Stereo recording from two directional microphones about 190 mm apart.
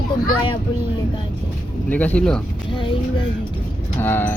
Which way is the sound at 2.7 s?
25° left (ahead or behind).